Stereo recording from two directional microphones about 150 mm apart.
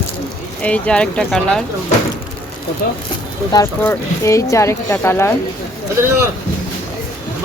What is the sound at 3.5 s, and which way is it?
Speech, 15° left (ahead or behind).